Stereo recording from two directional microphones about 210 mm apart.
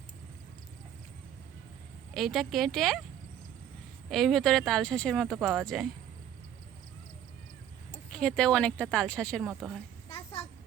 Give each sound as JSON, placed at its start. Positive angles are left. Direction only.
{"t": 2.1, "sound": "speech", "side_deg": 0}
{"t": 4.1, "sound": "speech", "side_deg": 0}
{"t": 8.1, "sound": "speech", "side_deg": 5}
{"t": 10.1, "sound": "a sound", "side_deg": 25}